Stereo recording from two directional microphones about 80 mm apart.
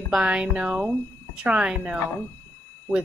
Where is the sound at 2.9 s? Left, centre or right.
Left.